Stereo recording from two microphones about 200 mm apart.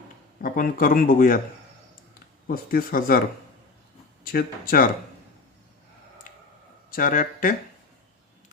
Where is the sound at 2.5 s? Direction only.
45° left (ahead or behind).